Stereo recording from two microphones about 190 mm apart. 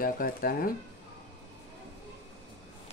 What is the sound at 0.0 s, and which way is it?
Speech, 45° left (ahead or behind).